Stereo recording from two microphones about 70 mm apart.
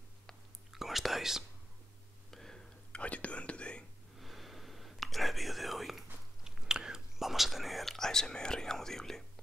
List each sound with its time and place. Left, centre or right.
0.7 s whispering: centre
2.3 s whispering: centre
4.2 s whispering: centre